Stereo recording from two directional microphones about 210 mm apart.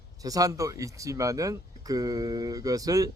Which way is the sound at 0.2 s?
15° right (ahead or behind).